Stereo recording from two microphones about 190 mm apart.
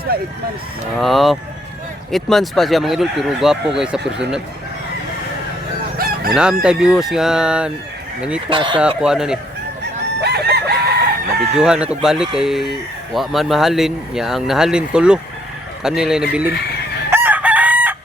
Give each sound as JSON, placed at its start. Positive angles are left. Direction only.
{"t": 0.1, "sound": "speech", "side_deg": -55}
{"t": 0.9, "sound": "speech", "side_deg": 0}
{"t": 6.3, "sound": "speech", "side_deg": -5}
{"t": 8.4, "sound": "speech", "side_deg": -25}
{"t": 9.0, "sound": "speech", "side_deg": -5}
{"t": 10.2, "sound": "chicken", "side_deg": -60}
{"t": 11.3, "sound": "speech", "side_deg": -5}
{"t": 17.1, "sound": "chicken", "side_deg": -10}